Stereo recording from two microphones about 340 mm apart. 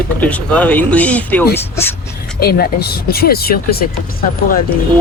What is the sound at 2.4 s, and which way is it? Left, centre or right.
Speech, left.